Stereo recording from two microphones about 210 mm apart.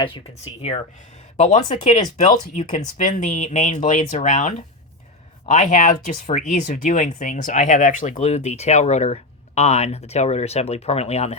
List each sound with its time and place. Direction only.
1.4 s speech: 35° left (ahead or behind)